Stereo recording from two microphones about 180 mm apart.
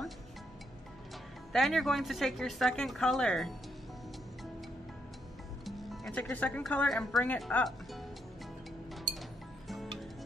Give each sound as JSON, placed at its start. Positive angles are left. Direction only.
{"t": 1.5, "sound": "speech", "side_deg": 0}
{"t": 5.7, "sound": "speech", "side_deg": 0}
{"t": 9.7, "sound": "music", "side_deg": 0}